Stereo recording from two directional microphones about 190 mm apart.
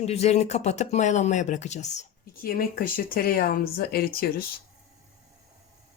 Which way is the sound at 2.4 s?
50° left (ahead or behind).